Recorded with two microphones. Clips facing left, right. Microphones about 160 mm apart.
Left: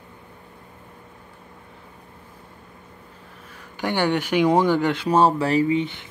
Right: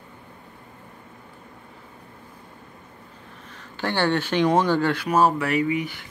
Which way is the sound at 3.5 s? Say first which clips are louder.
Left 1 dB; 15° left (ahead or behind).